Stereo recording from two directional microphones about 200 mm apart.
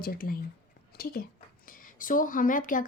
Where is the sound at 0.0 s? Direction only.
45° left (ahead or behind).